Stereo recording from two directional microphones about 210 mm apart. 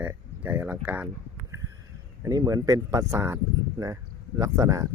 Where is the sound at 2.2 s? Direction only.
15° right (ahead or behind).